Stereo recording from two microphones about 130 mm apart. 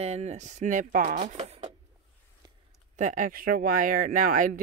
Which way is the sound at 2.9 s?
75° right (ahead or behind).